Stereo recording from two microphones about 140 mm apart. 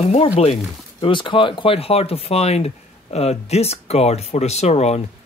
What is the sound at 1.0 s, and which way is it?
Speech, 35° left (ahead or behind).